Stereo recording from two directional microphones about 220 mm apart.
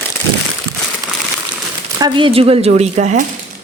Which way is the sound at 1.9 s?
20° right (ahead or behind).